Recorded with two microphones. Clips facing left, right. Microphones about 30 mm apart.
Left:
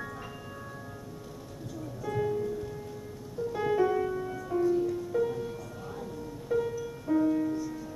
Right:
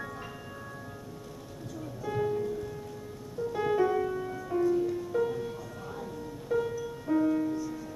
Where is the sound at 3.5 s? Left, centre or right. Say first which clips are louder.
Even; centre.